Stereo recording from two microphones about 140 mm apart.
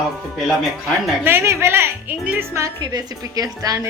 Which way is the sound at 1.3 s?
15° right (ahead or behind).